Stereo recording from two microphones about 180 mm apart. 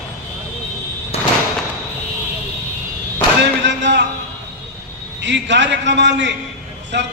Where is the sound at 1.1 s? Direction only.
35° left (ahead or behind).